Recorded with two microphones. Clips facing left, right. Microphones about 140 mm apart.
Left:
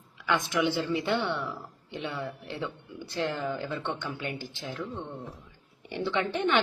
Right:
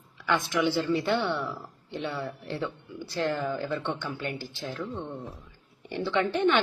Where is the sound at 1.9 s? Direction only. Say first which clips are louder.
Right 3 dB; 15° left (ahead or behind).